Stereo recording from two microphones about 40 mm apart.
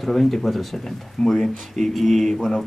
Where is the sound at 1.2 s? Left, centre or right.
Centre.